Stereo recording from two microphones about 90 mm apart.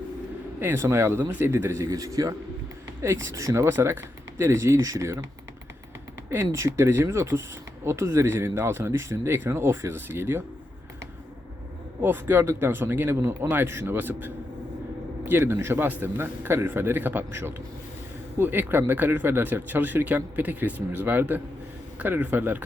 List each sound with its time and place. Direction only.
0.6 s speech: 25° right (ahead or behind)
6.3 s speech: 30° right (ahead or behind)
12.0 s speech: 25° right (ahead or behind)